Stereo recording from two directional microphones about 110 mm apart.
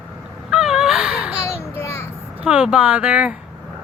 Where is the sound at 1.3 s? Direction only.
25° left (ahead or behind).